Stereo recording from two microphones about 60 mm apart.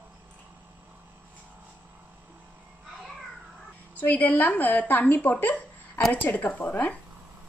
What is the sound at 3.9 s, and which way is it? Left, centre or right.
A woman's voice, left.